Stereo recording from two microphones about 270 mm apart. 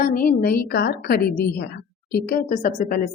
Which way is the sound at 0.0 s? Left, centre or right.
Left.